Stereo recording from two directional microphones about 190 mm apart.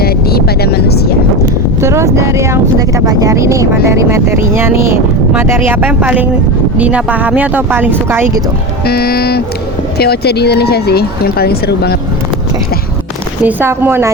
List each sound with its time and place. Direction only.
0.0 s vehicle: 55° left (ahead or behind)
1.8 s speech: 15° right (ahead or behind)
8.8 s speech: 55° left (ahead or behind)
13.4 s speech: 10° right (ahead or behind)